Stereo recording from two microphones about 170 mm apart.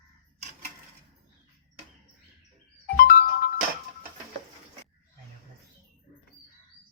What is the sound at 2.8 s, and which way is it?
Music, 60° left (ahead or behind).